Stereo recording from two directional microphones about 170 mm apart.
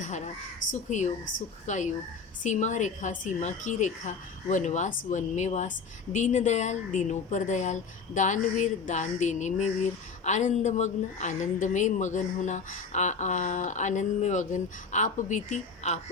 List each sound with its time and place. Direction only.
0.0 s crow: 45° left (ahead or behind)
0.7 s speech: 45° left (ahead or behind)